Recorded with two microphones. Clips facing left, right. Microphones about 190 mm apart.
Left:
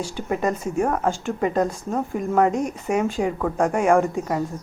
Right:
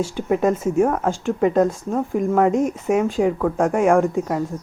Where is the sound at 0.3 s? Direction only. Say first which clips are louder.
Right 5 dB; 5° right (ahead or behind).